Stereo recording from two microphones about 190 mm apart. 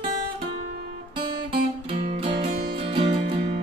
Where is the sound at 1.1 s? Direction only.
30° right (ahead or behind).